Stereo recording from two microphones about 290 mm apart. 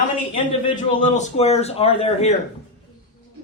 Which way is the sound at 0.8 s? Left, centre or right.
Left.